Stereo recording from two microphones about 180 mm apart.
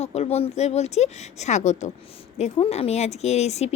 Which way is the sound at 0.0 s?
35° left (ahead or behind).